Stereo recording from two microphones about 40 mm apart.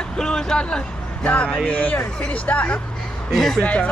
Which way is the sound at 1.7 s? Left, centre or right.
Left.